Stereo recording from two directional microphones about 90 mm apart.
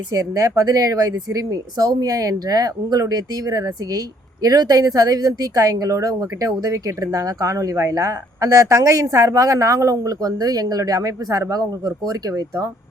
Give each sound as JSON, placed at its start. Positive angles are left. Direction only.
{"t": 0.1, "sound": "speech", "side_deg": -40}